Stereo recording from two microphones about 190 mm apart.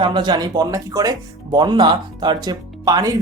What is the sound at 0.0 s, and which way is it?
Speech, 25° right (ahead or behind).